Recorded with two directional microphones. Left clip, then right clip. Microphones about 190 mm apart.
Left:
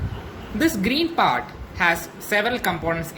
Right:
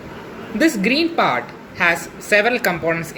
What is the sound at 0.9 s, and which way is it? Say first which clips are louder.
A woman's voice: right 3 dB; 35° left (ahead or behind).